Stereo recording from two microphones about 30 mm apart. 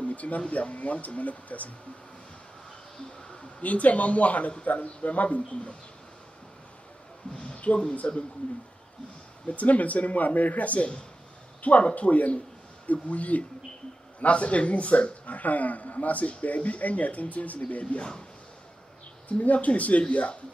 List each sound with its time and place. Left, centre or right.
0.0 s a sound: left
0.5 s speech: left
3.6 s speech: left
7.3 s speech: left
8.0 s speech: left
9.5 s speech: left
15.2 s speech: left
19.2 s speech: left